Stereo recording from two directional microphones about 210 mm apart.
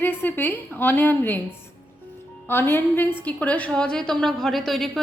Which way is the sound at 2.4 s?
10° left (ahead or behind).